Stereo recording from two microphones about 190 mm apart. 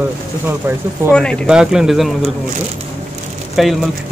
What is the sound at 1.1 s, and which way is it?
Speech, 5° left (ahead or behind).